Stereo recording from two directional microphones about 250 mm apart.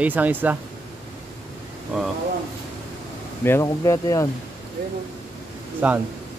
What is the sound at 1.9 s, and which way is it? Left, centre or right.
Speech, centre.